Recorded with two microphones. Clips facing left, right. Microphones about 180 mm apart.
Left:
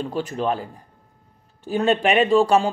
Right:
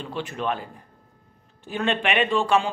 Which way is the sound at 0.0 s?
40° left (ahead or behind).